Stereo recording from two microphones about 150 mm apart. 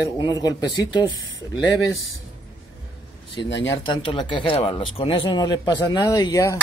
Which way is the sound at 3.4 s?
25° left (ahead or behind).